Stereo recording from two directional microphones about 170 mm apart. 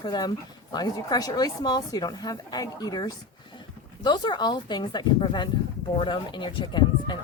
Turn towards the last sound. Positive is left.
turn(degrees=25)  # may be behind; listen again after turning